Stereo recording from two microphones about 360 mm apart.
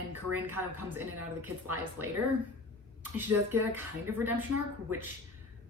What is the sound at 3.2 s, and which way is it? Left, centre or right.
Speech, right.